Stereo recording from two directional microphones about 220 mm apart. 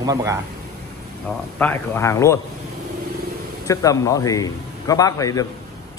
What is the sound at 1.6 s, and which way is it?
Speech, 10° left (ahead or behind).